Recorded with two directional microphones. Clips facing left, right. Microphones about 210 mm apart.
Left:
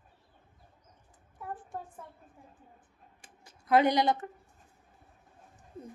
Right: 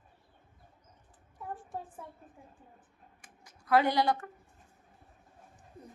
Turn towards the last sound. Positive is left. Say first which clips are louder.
# left 2 dB
turn(degrees=20)  # may be behind; listen again after turning